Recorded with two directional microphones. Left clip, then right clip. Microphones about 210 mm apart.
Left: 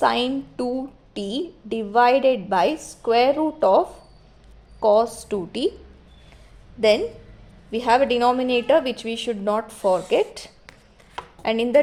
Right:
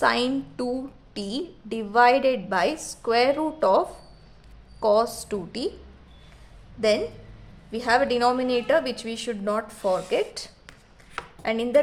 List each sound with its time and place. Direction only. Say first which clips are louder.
0.0 s a woman's voice: left 2 dB; 15° left (ahead or behind)
7.7 s a woman's voice: left 3 dB; 20° left (ahead or behind)